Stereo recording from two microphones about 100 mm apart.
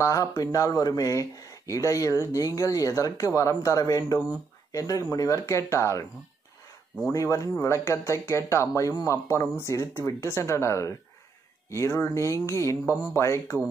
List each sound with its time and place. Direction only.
0.0 s speech: 30° left (ahead or behind)
7.1 s speech: 35° left (ahead or behind)